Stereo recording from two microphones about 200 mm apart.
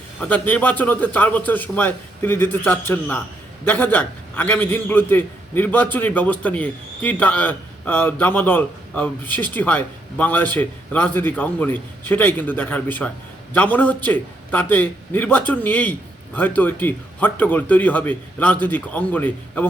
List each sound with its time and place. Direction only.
0.2 s a man's voice: 10° left (ahead or behind)